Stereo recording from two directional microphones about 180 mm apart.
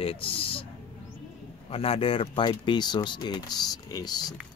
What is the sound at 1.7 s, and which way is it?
Speech, 30° left (ahead or behind).